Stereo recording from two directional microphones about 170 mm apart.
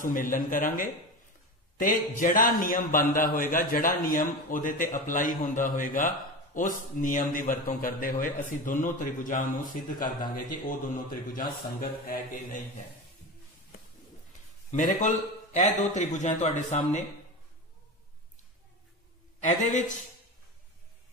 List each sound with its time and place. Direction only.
0.0 s a man's voice: 50° left (ahead or behind)
14.7 s a man's voice: 50° left (ahead or behind)
19.4 s a man's voice: 45° left (ahead or behind)